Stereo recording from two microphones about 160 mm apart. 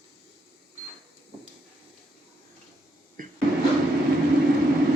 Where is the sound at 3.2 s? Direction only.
55° right (ahead or behind).